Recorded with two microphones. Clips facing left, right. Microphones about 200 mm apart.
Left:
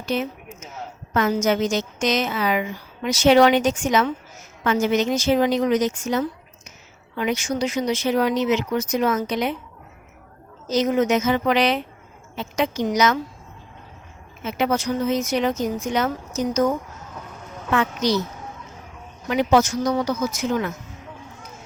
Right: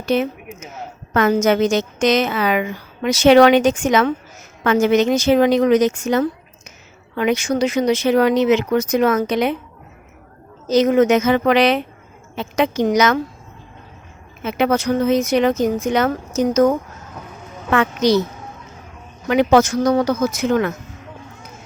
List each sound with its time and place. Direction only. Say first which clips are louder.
0.0 s a woman's voice: right 6 dB; 65° right (ahead or behind)
10.7 s a woman's voice: right 6 dB; 70° right (ahead or behind)
14.4 s a woman's voice: right 5 dB; 70° right (ahead or behind)
19.3 s a woman's voice: right 5 dB; 70° right (ahead or behind)